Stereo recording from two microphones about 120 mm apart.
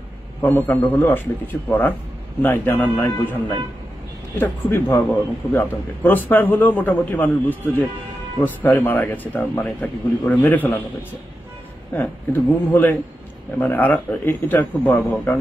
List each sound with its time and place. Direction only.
0.4 s a man's voice: 20° left (ahead or behind)
4.4 s a man's voice: 15° left (ahead or behind)
11.9 s a man's voice: 15° left (ahead or behind)